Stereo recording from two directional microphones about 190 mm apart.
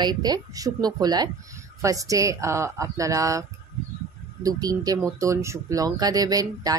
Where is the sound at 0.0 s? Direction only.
20° right (ahead or behind).